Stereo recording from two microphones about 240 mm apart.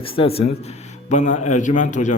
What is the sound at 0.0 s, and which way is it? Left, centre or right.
A man's voice, left.